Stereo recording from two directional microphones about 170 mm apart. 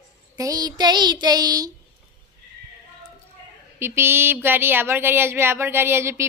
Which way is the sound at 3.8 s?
15° right (ahead or behind).